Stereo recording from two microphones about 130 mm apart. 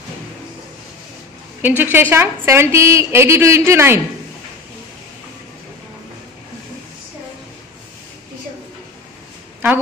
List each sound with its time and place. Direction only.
1.6 s a woman's voice: 15° right (ahead or behind)